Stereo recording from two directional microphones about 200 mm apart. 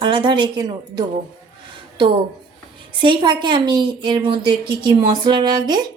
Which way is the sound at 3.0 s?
25° right (ahead or behind).